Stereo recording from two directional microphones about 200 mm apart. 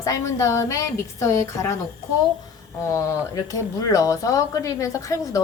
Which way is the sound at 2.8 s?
15° left (ahead or behind).